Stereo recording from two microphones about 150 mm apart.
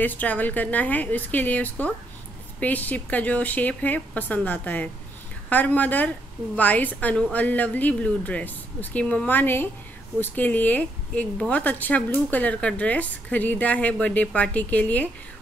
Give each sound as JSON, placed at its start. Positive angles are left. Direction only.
{"t": 0.0, "sound": "speech", "side_deg": 10}